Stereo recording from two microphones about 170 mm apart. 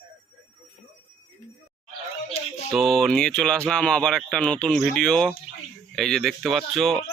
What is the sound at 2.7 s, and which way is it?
Speech, centre (ahead or behind).